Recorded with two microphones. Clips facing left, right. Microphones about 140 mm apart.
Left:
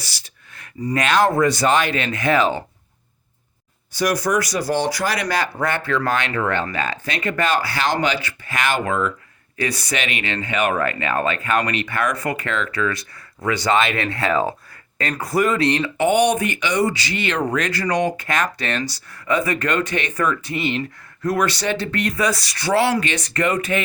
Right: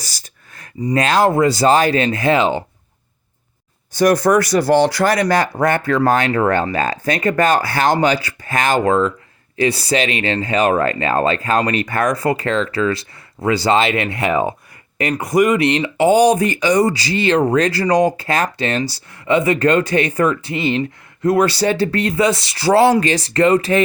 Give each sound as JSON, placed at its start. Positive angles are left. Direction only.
{"t": 0.0, "sound": "a sound", "side_deg": -45}
{"t": 0.9, "sound": "speech", "side_deg": -35}
{"t": 3.9, "sound": "speech", "side_deg": -55}
{"t": 5.1, "sound": "speech", "side_deg": -45}
{"t": 16.0, "sound": "speech", "side_deg": -35}